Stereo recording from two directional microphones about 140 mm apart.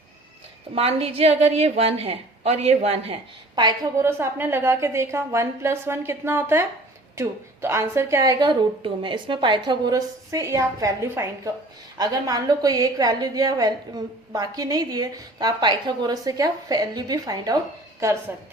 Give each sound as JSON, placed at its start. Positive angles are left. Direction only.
{"t": 0.8, "sound": "a woman's voice", "side_deg": -45}
{"t": 3.5, "sound": "a woman's voice", "side_deg": -30}
{"t": 4.0, "sound": "a woman's voice", "side_deg": -15}